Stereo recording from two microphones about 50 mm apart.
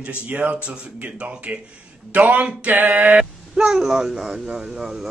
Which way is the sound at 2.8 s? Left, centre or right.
Right.